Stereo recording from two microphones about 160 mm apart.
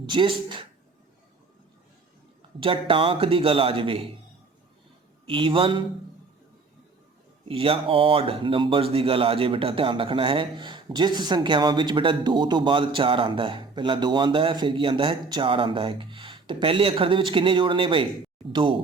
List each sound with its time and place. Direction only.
0.0 s speech: 30° right (ahead or behind)
2.6 s speech: 35° right (ahead or behind)
5.2 s speech: 35° right (ahead or behind)
7.4 s speech: 35° right (ahead or behind)